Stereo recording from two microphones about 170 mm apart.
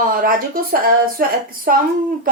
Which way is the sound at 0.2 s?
55° right (ahead or behind).